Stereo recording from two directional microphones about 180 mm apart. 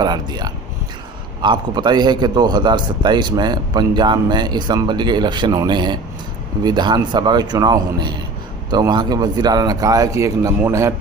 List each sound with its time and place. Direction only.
0.0 s a man's voice: 25° right (ahead or behind)